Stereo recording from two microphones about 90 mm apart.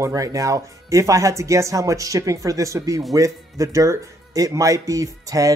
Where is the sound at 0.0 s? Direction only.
40° right (ahead or behind).